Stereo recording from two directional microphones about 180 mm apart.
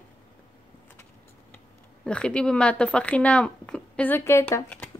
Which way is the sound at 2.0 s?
5° left (ahead or behind).